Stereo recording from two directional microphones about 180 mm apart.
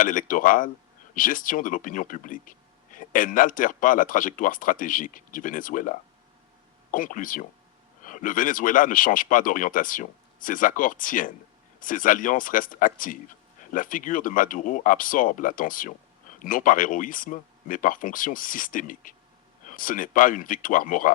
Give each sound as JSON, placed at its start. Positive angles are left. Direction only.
{"t": 0.0, "sound": "speech", "side_deg": 50}